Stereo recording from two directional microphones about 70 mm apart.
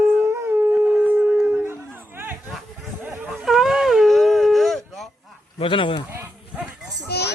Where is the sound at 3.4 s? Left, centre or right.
Centre.